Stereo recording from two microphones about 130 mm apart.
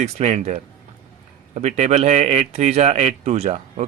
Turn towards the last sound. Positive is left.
turn(degrees=-55)  # may be behind; listen again after turning